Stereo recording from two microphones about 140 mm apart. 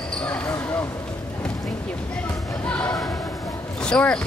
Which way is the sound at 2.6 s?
10° left (ahead or behind).